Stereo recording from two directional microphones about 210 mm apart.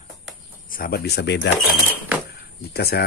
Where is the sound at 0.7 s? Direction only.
45° left (ahead or behind).